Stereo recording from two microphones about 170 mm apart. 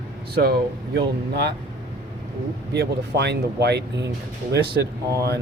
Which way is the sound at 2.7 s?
80° right.